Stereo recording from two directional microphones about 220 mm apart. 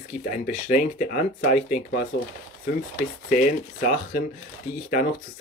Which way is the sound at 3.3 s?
35° left (ahead or behind).